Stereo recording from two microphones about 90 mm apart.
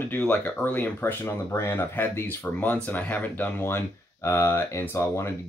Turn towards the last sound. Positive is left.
turn(degrees=30)  # may be behind; listen again after turning